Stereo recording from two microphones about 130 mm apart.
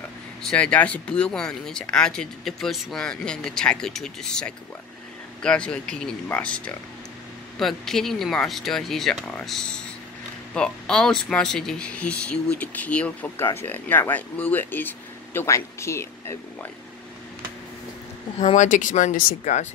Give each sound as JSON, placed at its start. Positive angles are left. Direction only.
{"t": 0.5, "sound": "speech", "side_deg": 10}
{"t": 18.4, "sound": "speech", "side_deg": 65}